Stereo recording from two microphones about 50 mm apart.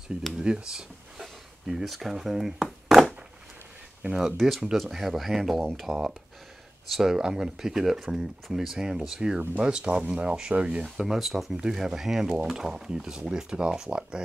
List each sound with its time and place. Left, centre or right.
0.4 s speech: centre
4.4 s speech: centre; by 10.9 s right
11.0 s speech: centre